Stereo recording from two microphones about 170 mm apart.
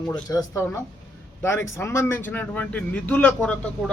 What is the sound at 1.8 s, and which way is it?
Speech, 15° left (ahead or behind).